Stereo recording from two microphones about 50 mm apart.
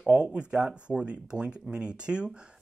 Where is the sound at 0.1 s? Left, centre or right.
Right.